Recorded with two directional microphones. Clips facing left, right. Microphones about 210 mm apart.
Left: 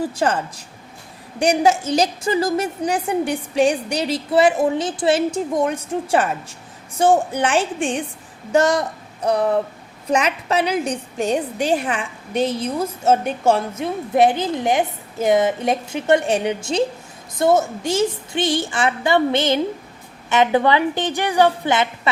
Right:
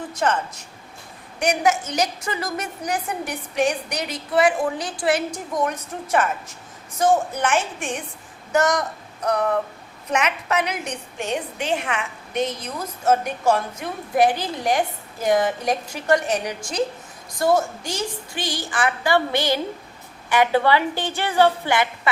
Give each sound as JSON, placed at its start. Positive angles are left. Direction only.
{"t": 0.0, "sound": "a woman's voice", "side_deg": 30}